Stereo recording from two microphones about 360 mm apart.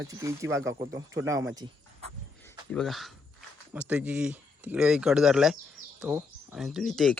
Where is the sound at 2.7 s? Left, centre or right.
Centre.